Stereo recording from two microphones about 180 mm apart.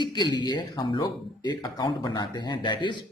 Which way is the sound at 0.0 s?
25° left (ahead or behind).